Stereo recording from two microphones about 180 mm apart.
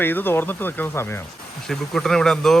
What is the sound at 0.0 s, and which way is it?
Speech, 10° left (ahead or behind).